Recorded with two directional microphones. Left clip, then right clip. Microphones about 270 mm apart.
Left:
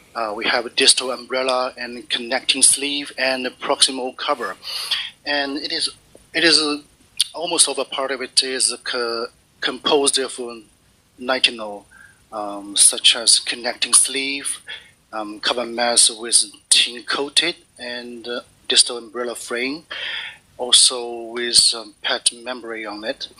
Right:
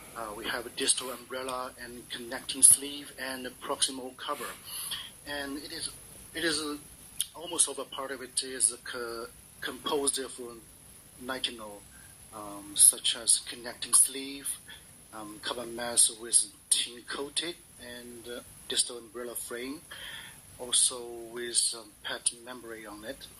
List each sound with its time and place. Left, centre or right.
0.1 s speech: left